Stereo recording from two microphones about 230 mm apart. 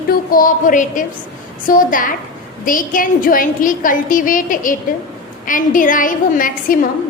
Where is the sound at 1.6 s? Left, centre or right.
Left.